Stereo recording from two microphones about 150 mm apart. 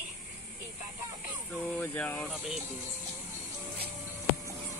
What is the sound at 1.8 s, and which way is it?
Speech, 10° left (ahead or behind).